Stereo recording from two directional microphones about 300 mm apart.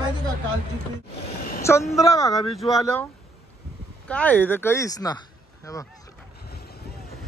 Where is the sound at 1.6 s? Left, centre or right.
Centre.